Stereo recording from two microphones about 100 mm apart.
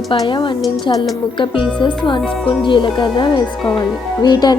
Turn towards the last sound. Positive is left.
turn(degrees=45)  # may be behind; listen again after turning